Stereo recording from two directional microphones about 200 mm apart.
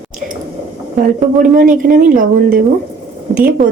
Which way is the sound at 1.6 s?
40° right (ahead or behind).